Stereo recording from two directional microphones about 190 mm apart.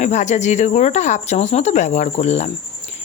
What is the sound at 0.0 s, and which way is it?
Speech, 40° left (ahead or behind).